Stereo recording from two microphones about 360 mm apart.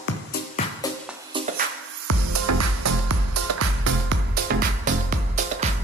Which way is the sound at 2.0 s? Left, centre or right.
Right.